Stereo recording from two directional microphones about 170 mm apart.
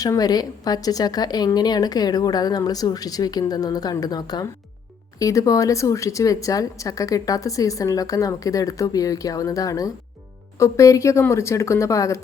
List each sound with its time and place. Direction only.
0.0 s a woman's voice: 20° left (ahead or behind)